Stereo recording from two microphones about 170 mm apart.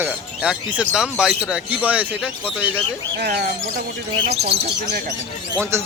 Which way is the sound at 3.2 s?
60° right (ahead or behind).